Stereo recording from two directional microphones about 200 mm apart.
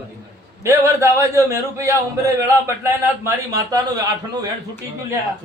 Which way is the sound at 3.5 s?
15° right (ahead or behind).